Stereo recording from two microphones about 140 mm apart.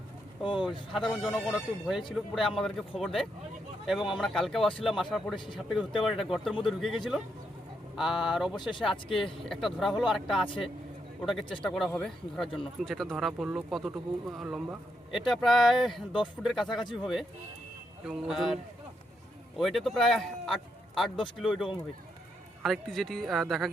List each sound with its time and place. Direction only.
0.4 s speech: 35° left (ahead or behind)
0.9 s speech: centre (ahead or behind)